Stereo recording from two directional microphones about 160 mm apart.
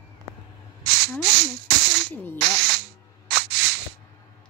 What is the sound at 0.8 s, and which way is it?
Spray, 90° right.